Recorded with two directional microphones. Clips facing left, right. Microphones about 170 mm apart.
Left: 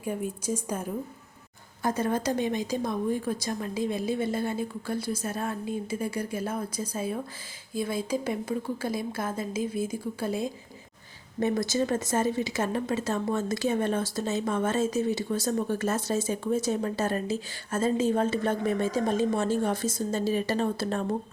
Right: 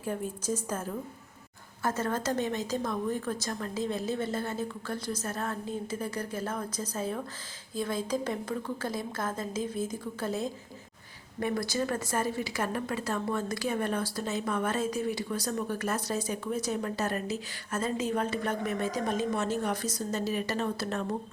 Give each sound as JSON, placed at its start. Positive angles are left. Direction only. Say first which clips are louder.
{"t": 0.0, "sound": "a woman's voice", "louder": "left 2 dB", "side_deg": 10}
{"t": 11.3, "sound": "speech", "louder": "left 4 dB", "side_deg": 25}